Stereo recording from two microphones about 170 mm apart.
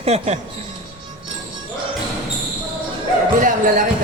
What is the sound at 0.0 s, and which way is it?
Speech, 40° right (ahead or behind).